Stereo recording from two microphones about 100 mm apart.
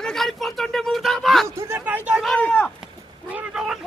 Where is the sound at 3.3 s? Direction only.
15° right (ahead or behind).